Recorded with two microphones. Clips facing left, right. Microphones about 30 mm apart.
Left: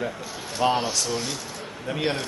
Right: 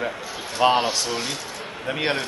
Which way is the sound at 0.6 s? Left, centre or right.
Right.